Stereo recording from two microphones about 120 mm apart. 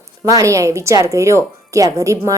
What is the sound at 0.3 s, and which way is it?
A woman's voice, 30° right (ahead or behind).